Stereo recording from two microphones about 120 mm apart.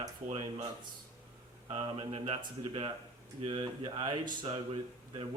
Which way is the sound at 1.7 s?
50° right (ahead or behind).